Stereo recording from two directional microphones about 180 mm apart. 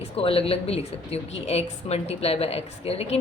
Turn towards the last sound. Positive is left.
turn(degrees=35)  # may be behind; listen again after turning